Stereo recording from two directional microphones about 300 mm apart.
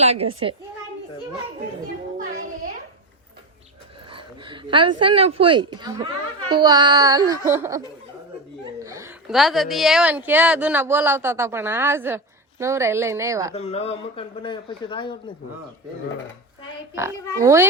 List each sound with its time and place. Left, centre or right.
0.0 s a child's voice: right
4.1 s a woman's voice: centre
8.8 s a woman's voice: centre
13.5 s speech: left
16.9 s a woman's voice: centre